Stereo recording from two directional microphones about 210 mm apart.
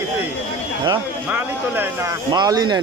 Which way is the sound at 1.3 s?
10° right (ahead or behind).